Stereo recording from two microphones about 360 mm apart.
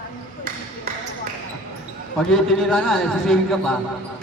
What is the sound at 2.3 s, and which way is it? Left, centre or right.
A man's voice, centre.